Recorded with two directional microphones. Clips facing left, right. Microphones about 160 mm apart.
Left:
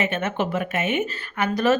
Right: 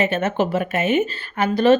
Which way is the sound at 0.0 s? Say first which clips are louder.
Right 4 dB; 35° right (ahead or behind).